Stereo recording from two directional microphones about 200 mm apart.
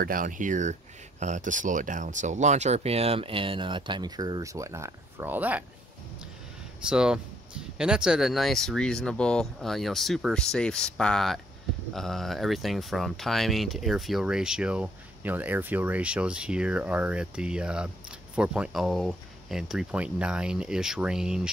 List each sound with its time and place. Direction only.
0.0 s speech: 45° right (ahead or behind); by 5.6 s 10° right (ahead or behind)
6.9 s speech: 5° right (ahead or behind)